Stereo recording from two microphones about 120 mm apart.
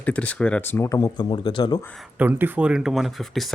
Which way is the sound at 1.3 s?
40° left (ahead or behind).